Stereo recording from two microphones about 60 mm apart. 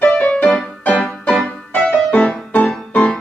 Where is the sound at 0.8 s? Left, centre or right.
Centre.